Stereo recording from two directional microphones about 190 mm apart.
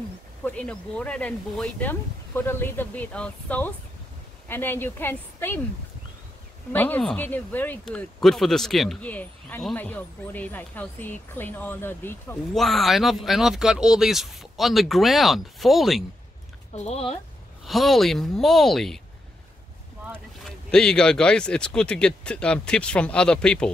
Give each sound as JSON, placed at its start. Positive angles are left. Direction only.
{"t": 0.4, "sound": "speech", "side_deg": 5}
{"t": 6.7, "sound": "speech", "side_deg": 10}
{"t": 12.6, "sound": "speech", "side_deg": 0}
{"t": 16.7, "sound": "speech", "side_deg": 35}
{"t": 17.6, "sound": "speech", "side_deg": 0}
{"t": 20.4, "sound": "speech", "side_deg": 5}